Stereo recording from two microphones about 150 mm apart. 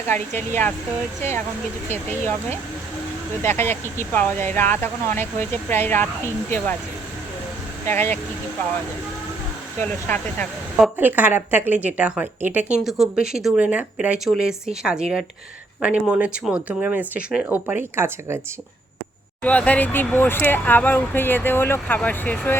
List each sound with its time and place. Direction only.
0.1 s speech: 15° left (ahead or behind)
3.4 s speech: 15° left (ahead or behind)
7.9 s speech: 15° left (ahead or behind)
9.8 s speech: 10° left (ahead or behind)
10.9 s speech: 10° right (ahead or behind)
19.4 s speech: 10° left (ahead or behind)